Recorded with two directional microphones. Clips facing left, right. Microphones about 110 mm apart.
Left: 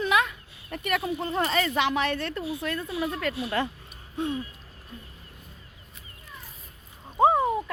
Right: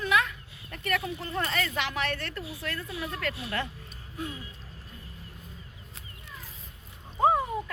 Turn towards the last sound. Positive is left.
turn(degrees=20)  # may be behind; listen again after turning